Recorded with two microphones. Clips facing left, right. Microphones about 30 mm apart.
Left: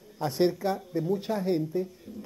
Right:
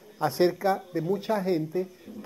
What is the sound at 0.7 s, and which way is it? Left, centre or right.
Speech, right.